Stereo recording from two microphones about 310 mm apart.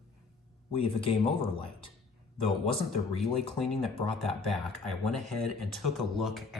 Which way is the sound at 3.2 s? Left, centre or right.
Centre.